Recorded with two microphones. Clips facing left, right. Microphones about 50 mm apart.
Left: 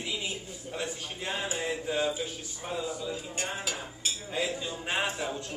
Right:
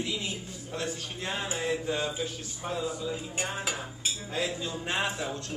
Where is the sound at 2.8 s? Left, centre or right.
Centre.